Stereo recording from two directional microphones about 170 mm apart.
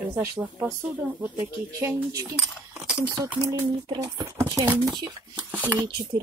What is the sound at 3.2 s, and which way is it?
Speech, 15° right (ahead or behind).